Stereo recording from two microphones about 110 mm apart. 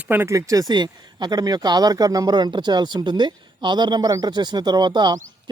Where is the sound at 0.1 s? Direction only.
20° right (ahead or behind).